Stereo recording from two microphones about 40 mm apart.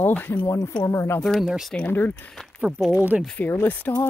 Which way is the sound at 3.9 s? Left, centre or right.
Left.